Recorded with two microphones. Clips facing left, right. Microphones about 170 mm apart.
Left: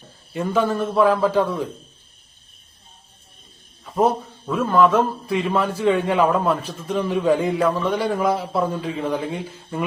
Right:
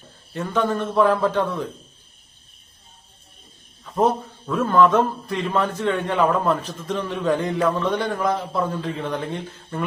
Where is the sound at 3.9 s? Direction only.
10° left (ahead or behind).